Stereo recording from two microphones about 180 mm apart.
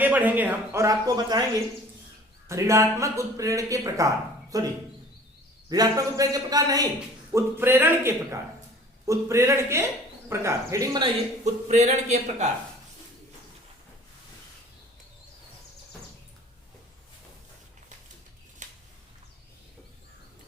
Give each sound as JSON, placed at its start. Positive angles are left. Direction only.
{"t": 0.0, "sound": "speech", "side_deg": -10}
{"t": 2.5, "sound": "a man's voice", "side_deg": -15}
{"t": 11.4, "sound": "speech", "side_deg": -40}
{"t": 18.6, "sound": "a sound", "side_deg": -45}